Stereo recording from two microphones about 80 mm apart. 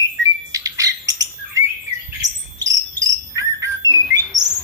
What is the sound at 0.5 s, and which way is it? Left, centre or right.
Bird, right.